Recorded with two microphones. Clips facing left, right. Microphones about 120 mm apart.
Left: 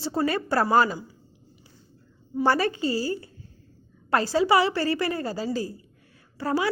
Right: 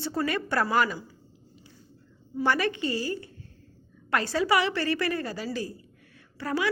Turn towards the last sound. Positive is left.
turn(degrees=30)  # may be behind; listen again after turning